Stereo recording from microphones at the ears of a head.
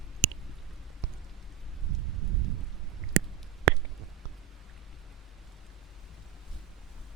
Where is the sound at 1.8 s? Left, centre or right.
Right.